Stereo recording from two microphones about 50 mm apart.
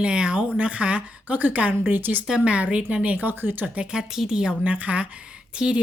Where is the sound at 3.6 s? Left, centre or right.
Right.